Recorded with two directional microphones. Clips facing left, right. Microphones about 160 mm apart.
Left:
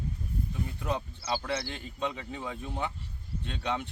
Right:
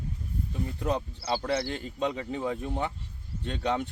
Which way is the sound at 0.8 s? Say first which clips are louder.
Right 5 dB; 35° right (ahead or behind).